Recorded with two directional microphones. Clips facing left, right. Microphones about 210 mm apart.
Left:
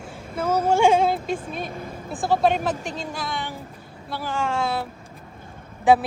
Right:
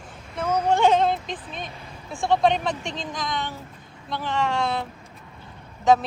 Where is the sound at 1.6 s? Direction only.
50° left (ahead or behind).